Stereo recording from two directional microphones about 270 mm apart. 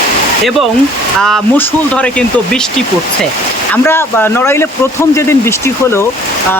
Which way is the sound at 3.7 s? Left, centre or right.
Centre.